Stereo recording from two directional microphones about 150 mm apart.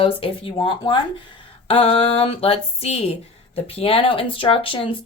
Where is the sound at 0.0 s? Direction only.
40° left (ahead or behind).